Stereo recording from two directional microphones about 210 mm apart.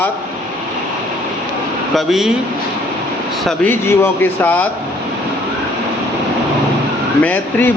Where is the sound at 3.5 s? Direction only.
10° left (ahead or behind).